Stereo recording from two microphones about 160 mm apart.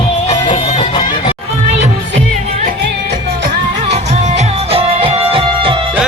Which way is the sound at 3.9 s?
45° right (ahead or behind).